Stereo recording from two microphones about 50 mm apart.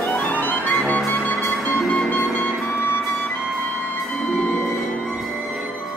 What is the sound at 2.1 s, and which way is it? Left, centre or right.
Music, centre.